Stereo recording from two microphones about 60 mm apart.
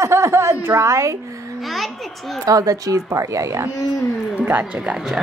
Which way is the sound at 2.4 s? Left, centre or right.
Right.